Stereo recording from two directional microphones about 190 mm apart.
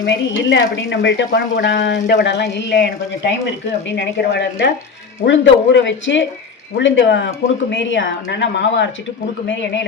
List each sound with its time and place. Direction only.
0.0 s speech: 70° left (ahead or behind)
3.9 s a woman's voice: 60° left (ahead or behind)